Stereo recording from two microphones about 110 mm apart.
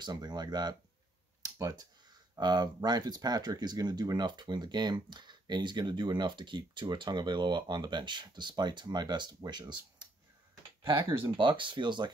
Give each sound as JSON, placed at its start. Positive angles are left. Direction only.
{"t": 0.0, "sound": "speech", "side_deg": -40}
{"t": 1.4, "sound": "computer keyboard", "side_deg": -35}
{"t": 2.3, "sound": "speech", "side_deg": -40}
{"t": 10.8, "sound": "speech", "side_deg": -25}
{"t": 11.2, "sound": "speech", "side_deg": -50}